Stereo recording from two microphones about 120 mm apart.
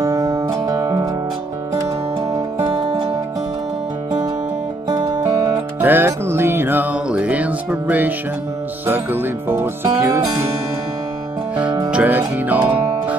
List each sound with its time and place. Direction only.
0.0 s music: 30° right (ahead or behind)
4.8 s music: 35° right (ahead or behind)
5.8 s music: 15° right (ahead or behind)
8.8 s speech: 15° right (ahead or behind)
9.9 s music: 25° right (ahead or behind)
11.9 s speech: 10° right (ahead or behind)